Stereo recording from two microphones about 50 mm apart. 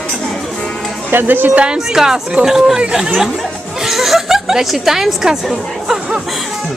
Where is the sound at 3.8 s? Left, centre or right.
Centre.